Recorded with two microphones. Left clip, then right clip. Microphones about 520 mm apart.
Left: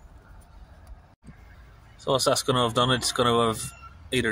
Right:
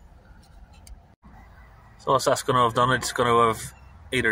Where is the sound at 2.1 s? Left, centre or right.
Left.